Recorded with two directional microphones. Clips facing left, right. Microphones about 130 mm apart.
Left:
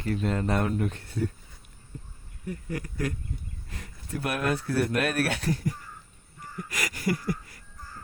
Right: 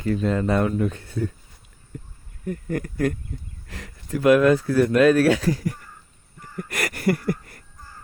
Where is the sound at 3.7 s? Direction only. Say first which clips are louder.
Right 7 dB; 85° right.